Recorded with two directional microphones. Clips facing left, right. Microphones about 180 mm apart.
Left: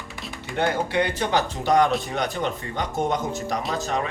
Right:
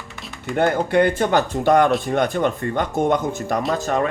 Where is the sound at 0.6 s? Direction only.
50° right (ahead or behind).